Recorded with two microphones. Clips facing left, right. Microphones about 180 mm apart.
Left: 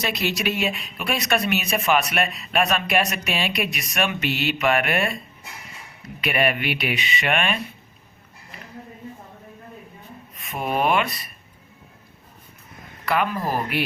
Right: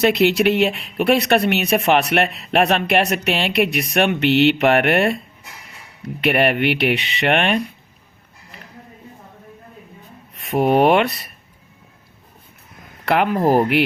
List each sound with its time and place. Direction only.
0.0 s speech: 65° right (ahead or behind)
6.2 s speech: 65° right (ahead or behind)
10.3 s speech: 65° right (ahead or behind)
13.1 s speech: 65° right (ahead or behind)